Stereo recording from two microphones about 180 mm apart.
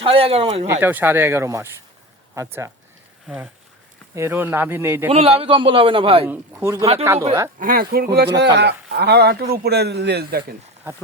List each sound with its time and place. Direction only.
0.0 s speech: 30° right (ahead or behind)
0.7 s speech: 10° right (ahead or behind)
3.2 s speech: 5° right (ahead or behind)
5.0 s a man's voice: 30° right (ahead or behind)
6.2 s speech: 10° right (ahead or behind)
7.6 s speech: 55° right (ahead or behind)